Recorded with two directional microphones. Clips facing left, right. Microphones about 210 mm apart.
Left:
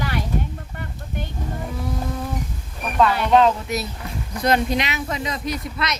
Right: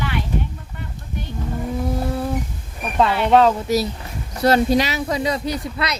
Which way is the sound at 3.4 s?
35° right (ahead or behind).